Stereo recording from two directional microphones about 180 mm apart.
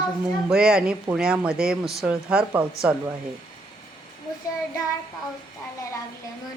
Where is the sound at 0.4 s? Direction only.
5° right (ahead or behind).